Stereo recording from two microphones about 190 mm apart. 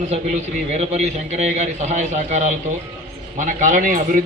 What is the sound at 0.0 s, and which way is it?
A man's voice, 35° right (ahead or behind).